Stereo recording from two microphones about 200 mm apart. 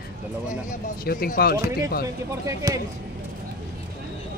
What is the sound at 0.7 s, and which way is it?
Speech, 50° left (ahead or behind).